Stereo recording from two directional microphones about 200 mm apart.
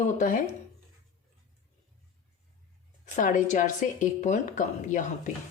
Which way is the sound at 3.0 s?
40° left (ahead or behind).